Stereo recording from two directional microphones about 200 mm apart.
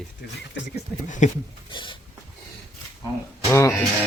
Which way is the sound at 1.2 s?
40° left (ahead or behind).